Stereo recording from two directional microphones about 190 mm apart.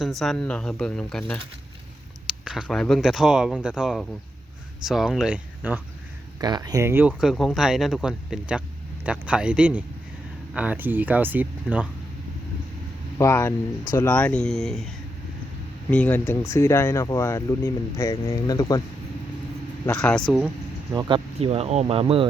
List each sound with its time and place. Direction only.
0.0 s speech: centre (ahead or behind)
2.2 s a sound: 5° right (ahead or behind)
2.6 s speech: 5° left (ahead or behind)
6.4 s speech: 20° right (ahead or behind)
7.1 s speech: centre (ahead or behind)
13.1 s speech: 15° left (ahead or behind)
14.1 s speech: 5° left (ahead or behind)
15.9 s speech: 10° left (ahead or behind)
19.9 s speech: 5° left (ahead or behind)
20.9 s speech: 20° right (ahead or behind)
21.3 s speech: 30° right (ahead or behind)